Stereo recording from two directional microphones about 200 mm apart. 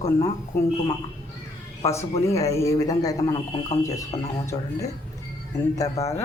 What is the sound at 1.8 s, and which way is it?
A man's voice, 15° left (ahead or behind).